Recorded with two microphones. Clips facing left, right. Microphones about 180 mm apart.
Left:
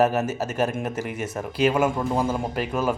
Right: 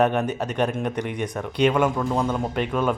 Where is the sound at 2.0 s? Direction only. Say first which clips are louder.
Even; 30° left (ahead or behind).